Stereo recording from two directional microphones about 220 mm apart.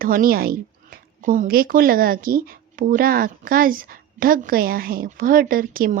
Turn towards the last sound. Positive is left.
turn(degrees=-40)  # may be behind; listen again after turning